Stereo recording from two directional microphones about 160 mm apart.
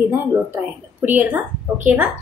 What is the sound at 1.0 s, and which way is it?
A woman's voice, 10° right (ahead or behind).